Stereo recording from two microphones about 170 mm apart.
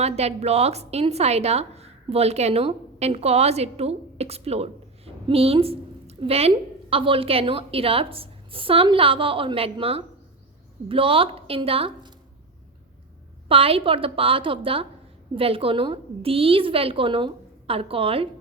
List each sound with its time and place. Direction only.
0.0 s a woman's voice: 40° right (ahead or behind)
13.5 s a woman's voice: 35° right (ahead or behind)